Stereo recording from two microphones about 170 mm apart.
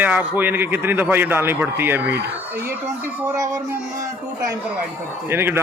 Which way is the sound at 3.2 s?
20° right (ahead or behind).